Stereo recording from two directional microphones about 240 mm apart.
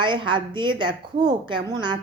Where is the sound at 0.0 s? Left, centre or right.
Centre.